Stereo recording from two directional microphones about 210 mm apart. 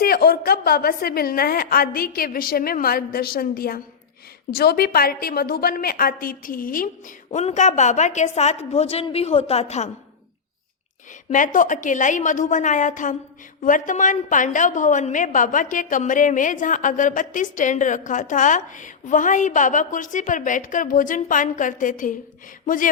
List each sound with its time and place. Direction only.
0.0 s a woman's voice: 45° left (ahead or behind)
11.3 s a woman's voice: 40° left (ahead or behind)